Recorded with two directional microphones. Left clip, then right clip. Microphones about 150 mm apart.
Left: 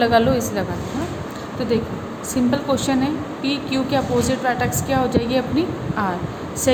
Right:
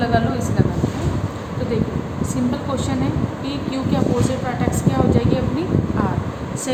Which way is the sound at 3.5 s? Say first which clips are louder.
Left 4 dB; 80° left.